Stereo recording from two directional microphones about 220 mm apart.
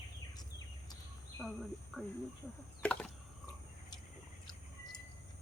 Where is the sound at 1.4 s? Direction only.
Centre (ahead or behind).